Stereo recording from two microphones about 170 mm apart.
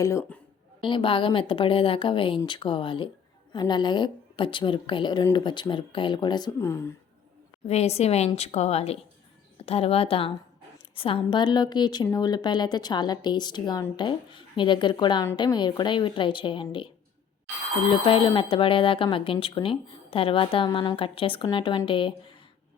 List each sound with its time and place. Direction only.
0.8 s a woman's voice: 30° left (ahead or behind)
6.6 s speech: 15° left (ahead or behind)
7.7 s a woman's voice: 40° left (ahead or behind)
18.0 s a woman's voice: 30° left (ahead or behind)